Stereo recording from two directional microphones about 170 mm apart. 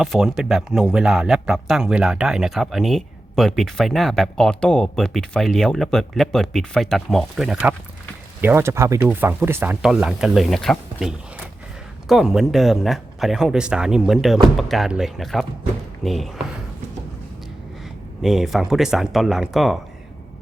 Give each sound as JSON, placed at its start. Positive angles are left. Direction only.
{"t": 0.0, "sound": "speech", "side_deg": 0}
{"t": 18.2, "sound": "speech", "side_deg": 0}